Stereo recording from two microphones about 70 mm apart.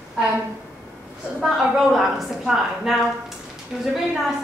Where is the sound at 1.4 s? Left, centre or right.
Centre.